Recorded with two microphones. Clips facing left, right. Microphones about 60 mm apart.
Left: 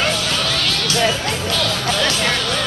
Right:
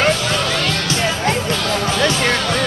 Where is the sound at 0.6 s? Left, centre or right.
Right.